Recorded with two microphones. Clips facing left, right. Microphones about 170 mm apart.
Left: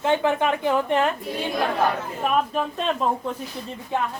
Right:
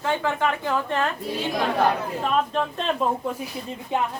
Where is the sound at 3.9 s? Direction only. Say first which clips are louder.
Right 1 dB; 20° right (ahead or behind).